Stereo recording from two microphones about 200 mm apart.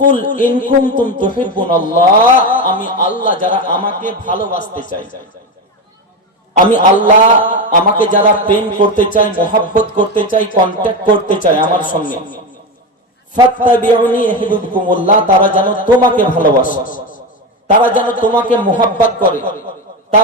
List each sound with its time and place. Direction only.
0.1 s speech: 40° left (ahead or behind)
6.7 s a man's voice: 40° left (ahead or behind)
13.7 s speech: 40° left (ahead or behind)